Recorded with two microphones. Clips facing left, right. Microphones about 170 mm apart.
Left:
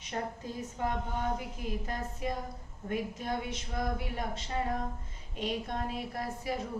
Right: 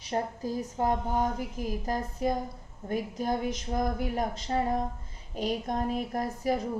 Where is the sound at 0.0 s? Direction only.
35° right (ahead or behind).